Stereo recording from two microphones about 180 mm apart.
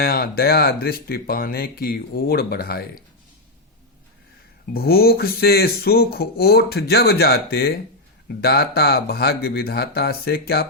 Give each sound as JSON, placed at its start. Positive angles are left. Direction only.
{"t": 0.0, "sound": "speech", "side_deg": 55}
{"t": 4.7, "sound": "speech", "side_deg": 60}